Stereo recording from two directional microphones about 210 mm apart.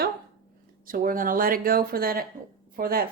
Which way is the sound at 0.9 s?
40° right (ahead or behind).